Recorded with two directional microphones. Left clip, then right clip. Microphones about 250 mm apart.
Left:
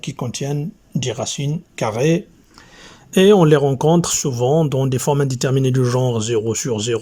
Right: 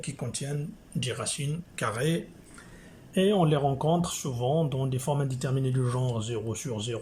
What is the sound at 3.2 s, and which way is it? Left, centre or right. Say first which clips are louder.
Speech: left 13 dB; left.